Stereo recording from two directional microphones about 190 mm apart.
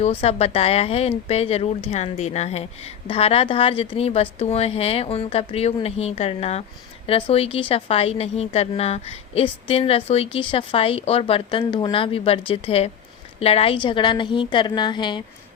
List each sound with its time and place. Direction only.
0.0 s a woman's voice: 35° left (ahead or behind)